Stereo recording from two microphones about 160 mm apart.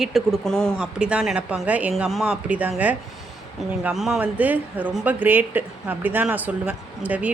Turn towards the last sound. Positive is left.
turn(degrees=-10)  # may be behind; listen again after turning